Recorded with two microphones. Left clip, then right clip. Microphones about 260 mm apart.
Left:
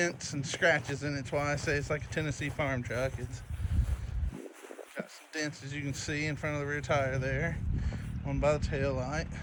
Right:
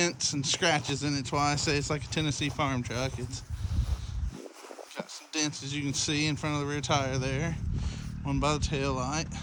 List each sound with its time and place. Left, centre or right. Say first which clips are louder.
0.0 s speech: right 4 dB; centre
4.9 s speech: right 4 dB; centre